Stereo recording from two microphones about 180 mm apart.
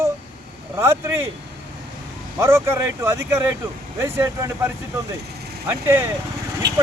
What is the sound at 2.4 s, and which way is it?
Speech, 15° right (ahead or behind).